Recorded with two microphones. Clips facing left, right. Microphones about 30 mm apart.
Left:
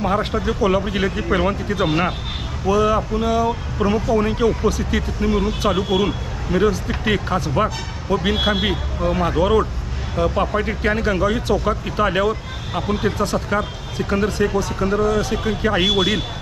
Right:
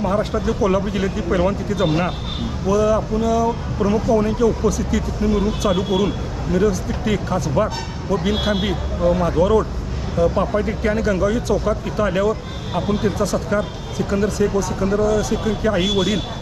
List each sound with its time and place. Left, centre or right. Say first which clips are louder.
0.0 s speech: even; left